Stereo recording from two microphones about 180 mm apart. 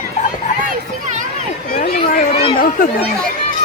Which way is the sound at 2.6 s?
50° left (ahead or behind).